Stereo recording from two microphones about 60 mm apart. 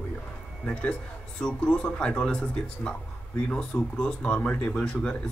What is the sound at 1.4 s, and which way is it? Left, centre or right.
Speech, centre.